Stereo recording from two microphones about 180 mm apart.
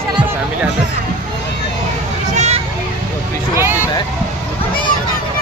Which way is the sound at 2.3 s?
40° right (ahead or behind).